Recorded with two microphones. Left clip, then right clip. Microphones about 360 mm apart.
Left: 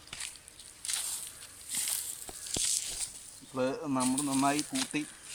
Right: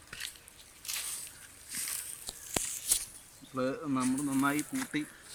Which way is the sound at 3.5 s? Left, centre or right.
Centre.